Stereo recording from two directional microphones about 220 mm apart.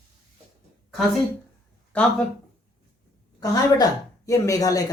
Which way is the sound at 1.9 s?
5° left (ahead or behind).